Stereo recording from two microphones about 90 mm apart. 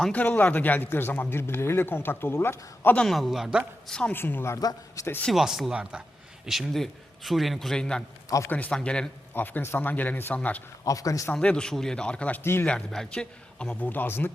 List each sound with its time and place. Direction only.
0.1 s speech: 20° left (ahead or behind)
2.9 s a man's voice: 5° left (ahead or behind)
3.8 s speech: 10° left (ahead or behind)
4.1 s speech: 20° left (ahead or behind)
4.5 s a man's voice: 35° left (ahead or behind)
5.3 s a man's voice: 5° right (ahead or behind)
9.3 s speech: 20° left (ahead or behind)
10.8 s a man's voice: 40° left (ahead or behind)
11.3 s speech: 10° left (ahead or behind)
12.4 s speech: 25° left (ahead or behind)
12.6 s speech: 10° left (ahead or behind); by 14.3 s 25° left (ahead or behind)